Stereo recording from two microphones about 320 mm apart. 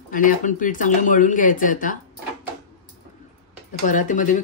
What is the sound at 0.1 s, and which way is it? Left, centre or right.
Speech, left.